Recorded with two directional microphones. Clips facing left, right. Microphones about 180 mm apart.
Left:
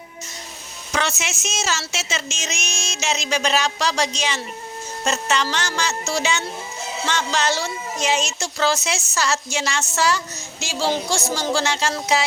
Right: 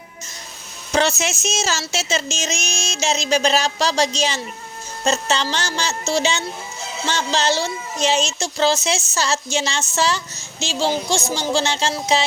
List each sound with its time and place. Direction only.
0.9 s a woman's voice: 35° right (ahead or behind)